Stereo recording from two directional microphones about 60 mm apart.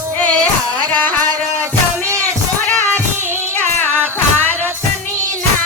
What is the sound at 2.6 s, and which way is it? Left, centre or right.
Music, left.